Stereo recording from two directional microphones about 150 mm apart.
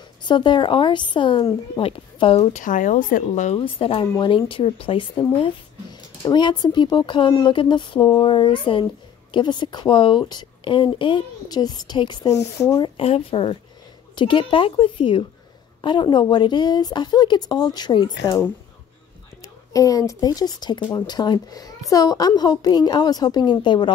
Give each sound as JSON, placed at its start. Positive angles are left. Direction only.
{"t": 0.2, "sound": "speech", "side_deg": 30}
{"t": 2.5, "sound": "speech", "side_deg": 60}
{"t": 3.5, "sound": "speech", "side_deg": 35}
{"t": 19.7, "sound": "speech", "side_deg": 25}